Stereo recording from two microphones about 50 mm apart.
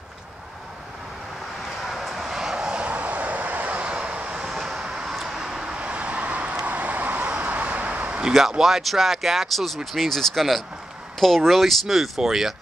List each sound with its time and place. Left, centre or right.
1.9 s vehicle: centre; by 4.5 s right
4.5 s vehicle: centre; by 8.2 s right
8.3 s speech: centre